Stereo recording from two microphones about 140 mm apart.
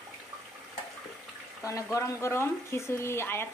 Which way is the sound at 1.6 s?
20° left (ahead or behind).